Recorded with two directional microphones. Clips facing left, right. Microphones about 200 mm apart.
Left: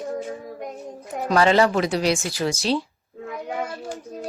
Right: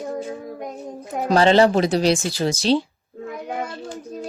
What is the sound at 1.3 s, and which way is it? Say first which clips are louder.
Speech: right 3 dB; 30° right (ahead or behind).